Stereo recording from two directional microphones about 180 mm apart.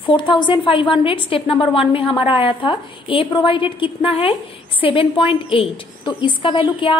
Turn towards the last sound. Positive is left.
turn(degrees=30)  # may be behind; listen again after turning